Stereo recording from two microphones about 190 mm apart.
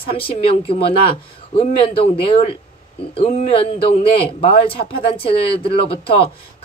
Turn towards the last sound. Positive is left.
turn(degrees=30)  # may be behind; listen again after turning